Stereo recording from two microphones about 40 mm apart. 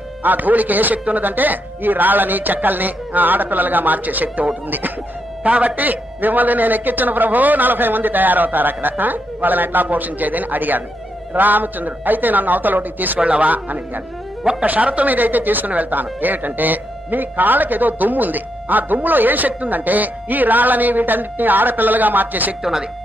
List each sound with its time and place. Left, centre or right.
0.2 s a man's voice: right
5.4 s a man's voice: right
5.8 s a man's voice: right
13.2 s a man's voice: right
14.4 s a man's voice: right
22.6 s speech: centre